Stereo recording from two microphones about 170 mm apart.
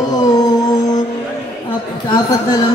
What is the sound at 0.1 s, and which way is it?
Music, 25° left (ahead or behind).